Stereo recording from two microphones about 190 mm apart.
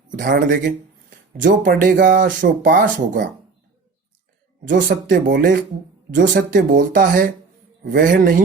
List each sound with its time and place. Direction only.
0.1 s speech: 45° right (ahead or behind)
4.6 s speech: 45° right (ahead or behind)